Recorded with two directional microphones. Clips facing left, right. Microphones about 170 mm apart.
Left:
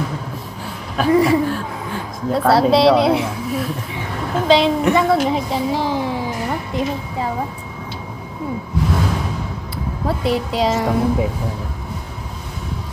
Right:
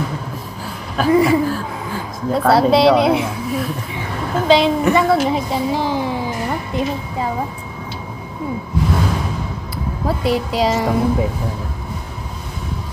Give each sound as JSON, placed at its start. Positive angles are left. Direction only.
{"t": 0.9, "sound": "a woman's voice", "side_deg": 0}
{"t": 10.0, "sound": "a woman's voice", "side_deg": 0}